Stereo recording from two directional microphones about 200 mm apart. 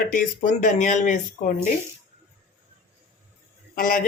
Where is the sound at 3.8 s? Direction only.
40° left (ahead or behind).